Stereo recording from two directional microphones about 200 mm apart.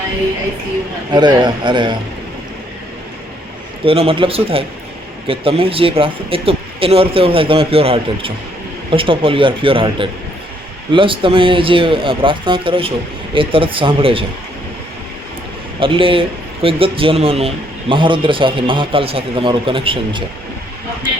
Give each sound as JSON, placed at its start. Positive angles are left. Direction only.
{"t": 1.1, "sound": "a man's voice", "side_deg": -20}
{"t": 3.8, "sound": "a man's voice", "side_deg": -30}
{"t": 15.8, "sound": "a man's voice", "side_deg": -25}